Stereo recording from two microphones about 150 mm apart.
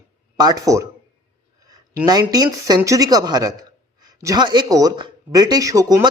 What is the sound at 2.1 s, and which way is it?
A man's voice, 25° right (ahead or behind).